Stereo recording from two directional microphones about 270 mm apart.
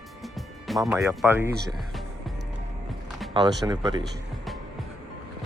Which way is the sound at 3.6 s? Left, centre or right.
Centre.